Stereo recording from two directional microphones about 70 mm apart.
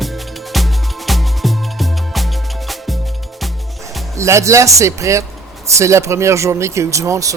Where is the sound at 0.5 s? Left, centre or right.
Centre.